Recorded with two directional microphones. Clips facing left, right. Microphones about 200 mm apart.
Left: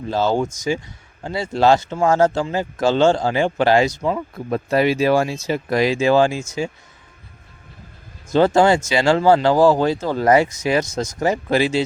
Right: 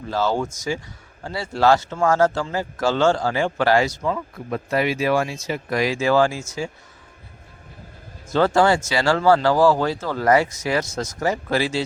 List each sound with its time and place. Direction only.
0.1 s speech: 20° left (ahead or behind)
4.4 s speech: 35° left (ahead or behind)
8.3 s speech: 20° left (ahead or behind)